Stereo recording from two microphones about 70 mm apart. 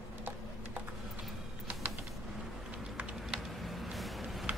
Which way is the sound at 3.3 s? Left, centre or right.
Centre.